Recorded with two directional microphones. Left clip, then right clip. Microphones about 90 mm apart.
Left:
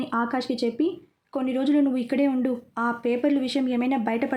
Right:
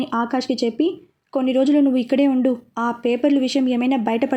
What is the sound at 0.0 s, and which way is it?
Speech, 50° right (ahead or behind).